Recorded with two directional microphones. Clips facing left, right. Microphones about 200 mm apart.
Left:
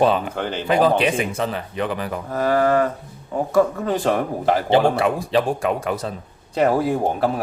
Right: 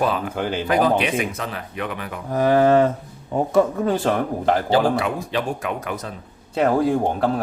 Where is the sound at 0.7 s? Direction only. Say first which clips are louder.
Left 2 dB; 30° left (ahead or behind).